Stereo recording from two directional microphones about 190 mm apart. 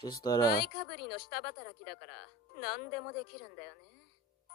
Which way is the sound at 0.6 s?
55° left (ahead or behind).